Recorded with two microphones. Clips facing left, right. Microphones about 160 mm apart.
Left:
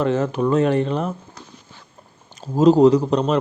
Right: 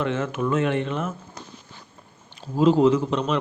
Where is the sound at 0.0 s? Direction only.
40° left (ahead or behind).